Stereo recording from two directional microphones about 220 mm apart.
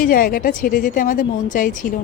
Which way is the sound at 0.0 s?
40° left (ahead or behind).